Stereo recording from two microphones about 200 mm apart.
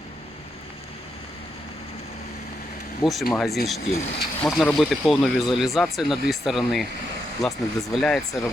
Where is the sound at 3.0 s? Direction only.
20° left (ahead or behind).